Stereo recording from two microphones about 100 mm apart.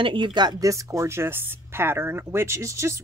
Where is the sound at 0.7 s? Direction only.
30° right (ahead or behind).